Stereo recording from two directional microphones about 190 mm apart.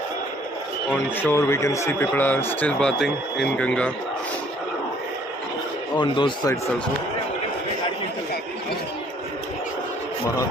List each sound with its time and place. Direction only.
1.2 s a man's voice: 15° left (ahead or behind)
6.0 s speech: 25° left (ahead or behind)